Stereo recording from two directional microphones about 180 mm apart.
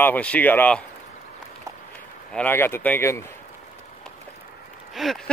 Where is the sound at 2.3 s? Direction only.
10° left (ahead or behind).